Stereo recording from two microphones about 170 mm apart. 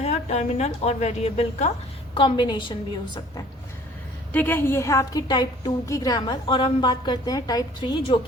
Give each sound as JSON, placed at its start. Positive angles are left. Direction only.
{"t": 0.0, "sound": "a woman's voice", "side_deg": 40}
{"t": 2.1, "sound": "a woman's voice", "side_deg": 30}
{"t": 4.3, "sound": "a woman's voice", "side_deg": 10}